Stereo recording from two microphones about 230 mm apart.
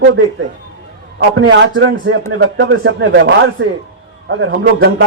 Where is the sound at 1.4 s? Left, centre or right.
Right.